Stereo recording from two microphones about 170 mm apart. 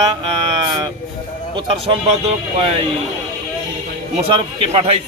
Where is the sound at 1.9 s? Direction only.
35° right (ahead or behind).